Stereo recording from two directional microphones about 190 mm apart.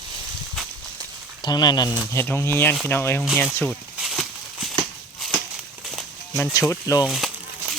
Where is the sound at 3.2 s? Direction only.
5° right (ahead or behind).